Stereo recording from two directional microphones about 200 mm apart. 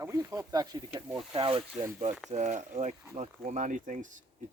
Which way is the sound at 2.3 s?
35° right (ahead or behind).